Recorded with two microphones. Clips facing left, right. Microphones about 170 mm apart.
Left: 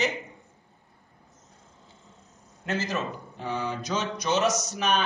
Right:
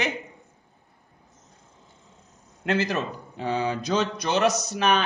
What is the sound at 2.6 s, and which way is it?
Speech, 65° right (ahead or behind).